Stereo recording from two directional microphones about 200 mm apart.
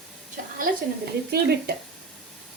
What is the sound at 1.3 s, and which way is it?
Speech, 50° right (ahead or behind).